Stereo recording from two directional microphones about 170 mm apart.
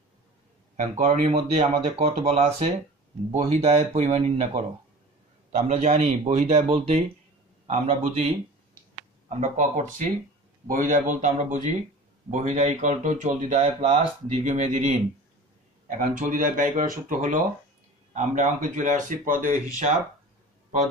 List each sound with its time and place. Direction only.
0.7 s speech: 45° right (ahead or behind)
9.3 s speech: 45° right (ahead or behind)
16.0 s speech: 50° right (ahead or behind)